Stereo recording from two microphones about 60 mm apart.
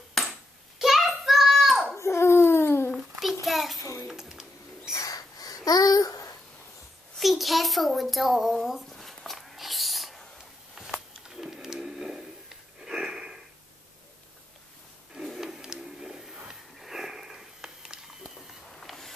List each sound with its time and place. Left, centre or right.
0.2 s hands: centre
0.7 s child singing: centre
2.0 s babbling: left
2.9 s a sound: centre
4.1 s bird: centre
4.9 s babbling: left
7.2 s a sound: centre
15.1 s a sound: centre
16.4 s sniff: centre